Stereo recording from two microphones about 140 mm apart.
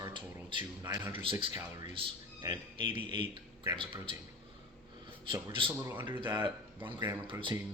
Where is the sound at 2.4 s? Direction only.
30° right (ahead or behind).